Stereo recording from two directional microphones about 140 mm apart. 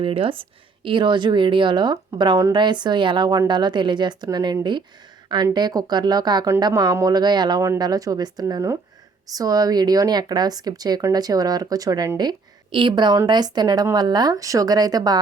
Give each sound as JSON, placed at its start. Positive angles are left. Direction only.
{"t": 0.0, "sound": "a woman's voice", "side_deg": -40}